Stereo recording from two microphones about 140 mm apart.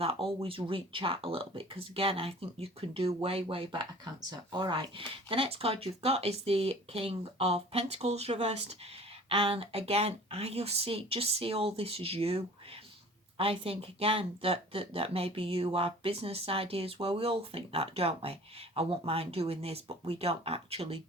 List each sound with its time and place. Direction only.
0.0 s speech: 45° right (ahead or behind)